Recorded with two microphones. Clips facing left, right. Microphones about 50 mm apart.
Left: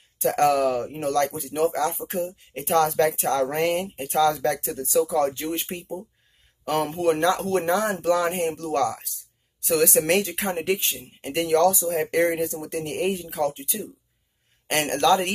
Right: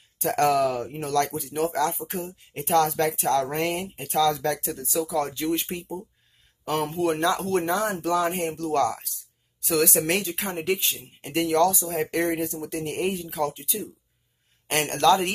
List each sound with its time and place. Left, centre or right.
0.5 s speech: left
6.7 s speech: left